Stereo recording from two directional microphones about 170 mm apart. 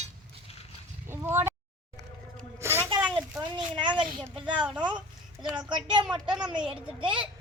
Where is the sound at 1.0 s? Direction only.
15° right (ahead or behind).